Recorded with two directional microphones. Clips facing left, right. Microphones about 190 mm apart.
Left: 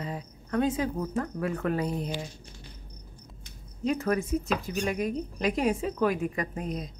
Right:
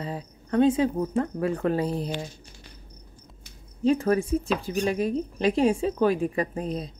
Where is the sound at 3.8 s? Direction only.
30° right (ahead or behind).